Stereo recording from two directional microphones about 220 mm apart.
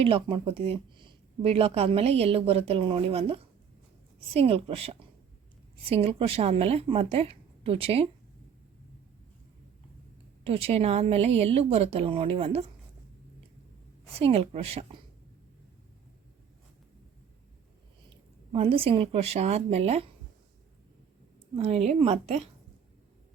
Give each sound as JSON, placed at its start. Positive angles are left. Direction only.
{"t": 0.0, "sound": "speech", "side_deg": -25}
{"t": 10.4, "sound": "speech", "side_deg": -25}
{"t": 14.1, "sound": "speech", "side_deg": -25}
{"t": 18.5, "sound": "speech", "side_deg": -25}
{"t": 21.5, "sound": "a woman's voice", "side_deg": -25}